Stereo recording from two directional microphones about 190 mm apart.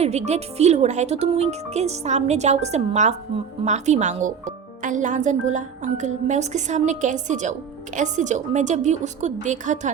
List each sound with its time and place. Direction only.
0.0 s speech: 35° right (ahead or behind)